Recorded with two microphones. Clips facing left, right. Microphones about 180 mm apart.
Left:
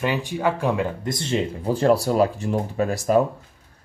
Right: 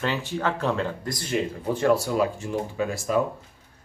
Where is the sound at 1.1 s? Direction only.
25° left (ahead or behind).